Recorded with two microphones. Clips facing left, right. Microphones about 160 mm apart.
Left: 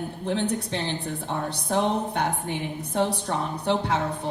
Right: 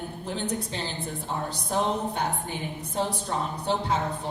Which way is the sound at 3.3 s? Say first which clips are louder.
Left 2 dB; 70° left (ahead or behind).